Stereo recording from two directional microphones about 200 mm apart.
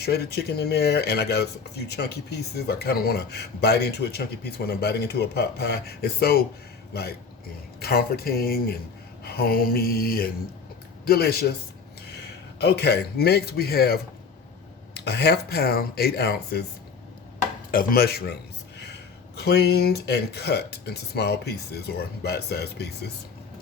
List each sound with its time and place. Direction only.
0.0 s speech: 55° left (ahead or behind)
12.5 s speech: 55° left (ahead or behind)
17.7 s speech: 45° left (ahead or behind)
19.4 s speech: 55° left (ahead or behind)